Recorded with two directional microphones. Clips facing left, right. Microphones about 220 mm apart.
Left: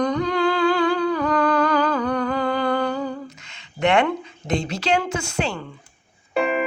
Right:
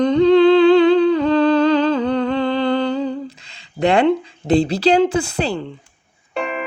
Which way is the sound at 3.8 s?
35° right (ahead or behind).